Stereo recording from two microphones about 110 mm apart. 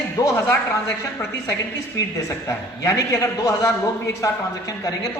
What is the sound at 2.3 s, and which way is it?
A man's voice, 30° left (ahead or behind).